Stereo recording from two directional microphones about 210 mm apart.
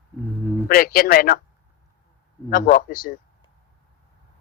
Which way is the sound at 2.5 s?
40° left (ahead or behind).